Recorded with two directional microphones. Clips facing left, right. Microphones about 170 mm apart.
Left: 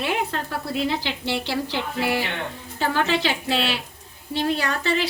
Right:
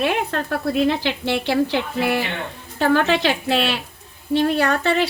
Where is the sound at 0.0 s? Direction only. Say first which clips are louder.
Right 4 dB; 60° right (ahead or behind).